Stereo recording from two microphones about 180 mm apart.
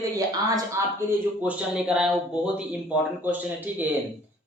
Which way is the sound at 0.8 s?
15° right (ahead or behind).